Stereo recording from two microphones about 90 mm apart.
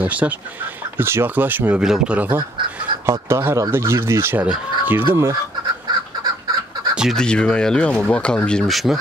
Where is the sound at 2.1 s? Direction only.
20° right (ahead or behind).